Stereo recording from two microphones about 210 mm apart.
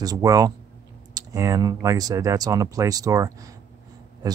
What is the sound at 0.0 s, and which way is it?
Speech, 15° right (ahead or behind).